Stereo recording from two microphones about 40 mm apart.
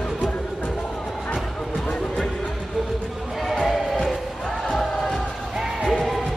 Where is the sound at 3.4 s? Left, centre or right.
Centre.